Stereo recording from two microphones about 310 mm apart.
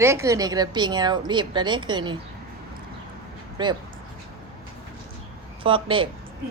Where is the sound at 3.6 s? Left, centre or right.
Centre.